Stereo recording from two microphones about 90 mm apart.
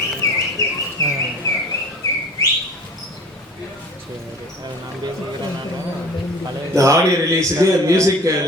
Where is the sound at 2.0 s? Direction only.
40° left (ahead or behind).